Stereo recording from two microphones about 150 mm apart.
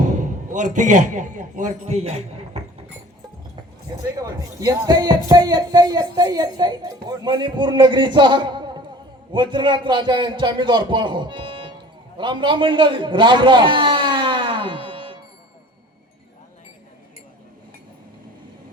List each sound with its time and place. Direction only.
0.0 s a man's voice: 55° right (ahead or behind)
3.5 s a man's voice: 25° right (ahead or behind)